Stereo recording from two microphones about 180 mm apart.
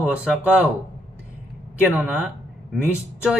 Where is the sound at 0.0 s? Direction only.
5° right (ahead or behind).